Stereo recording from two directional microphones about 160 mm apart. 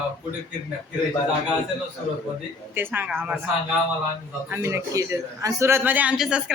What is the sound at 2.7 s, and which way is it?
Speech, 10° right (ahead or behind).